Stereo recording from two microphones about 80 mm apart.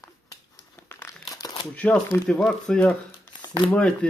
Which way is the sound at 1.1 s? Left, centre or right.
Left.